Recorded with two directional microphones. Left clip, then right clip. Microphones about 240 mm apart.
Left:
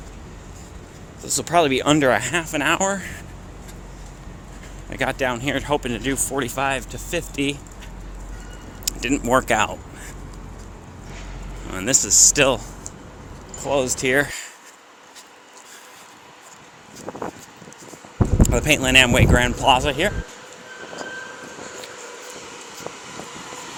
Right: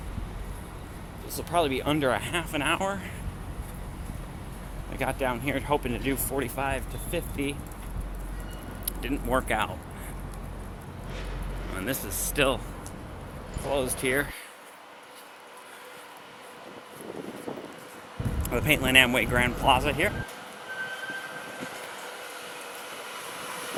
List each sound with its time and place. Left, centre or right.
1.3 s speech: left
4.9 s speech: left
8.8 s speech: left
11.7 s speech: left
13.7 s speech: left
18.4 s speech: left